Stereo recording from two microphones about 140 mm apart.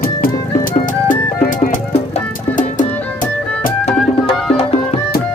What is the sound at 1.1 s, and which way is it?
Music, 80° left.